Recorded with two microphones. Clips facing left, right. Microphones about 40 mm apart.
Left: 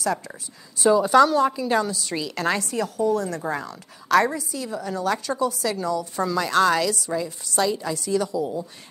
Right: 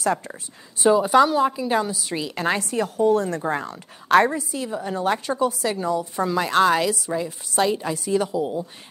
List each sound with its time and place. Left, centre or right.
0.0 s speech: right
0.8 s a woman's voice: centre
3.0 s a woman's voice: right